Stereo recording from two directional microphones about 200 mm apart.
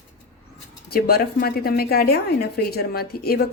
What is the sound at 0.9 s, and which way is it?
A woman's voice, 50° left (ahead or behind).